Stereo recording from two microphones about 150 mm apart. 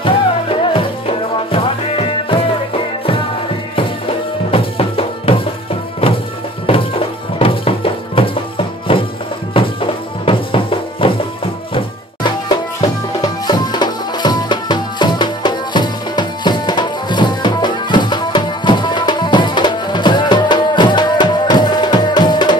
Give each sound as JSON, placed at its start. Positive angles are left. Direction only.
{"t": 0.0, "sound": "music", "side_deg": 35}
{"t": 4.5, "sound": "music", "side_deg": 40}
{"t": 6.6, "sound": "music", "side_deg": 40}